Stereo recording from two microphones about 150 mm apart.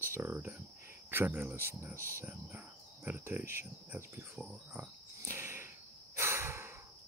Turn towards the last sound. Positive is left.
turn(degrees=-20)  # may be behind; listen again after turning